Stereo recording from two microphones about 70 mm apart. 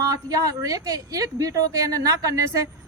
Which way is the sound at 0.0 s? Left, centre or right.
Right.